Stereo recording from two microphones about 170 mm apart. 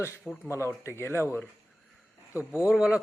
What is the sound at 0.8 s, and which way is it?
Speech, 15° left (ahead or behind).